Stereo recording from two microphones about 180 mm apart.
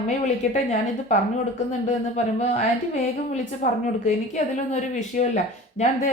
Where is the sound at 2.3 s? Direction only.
40° left (ahead or behind).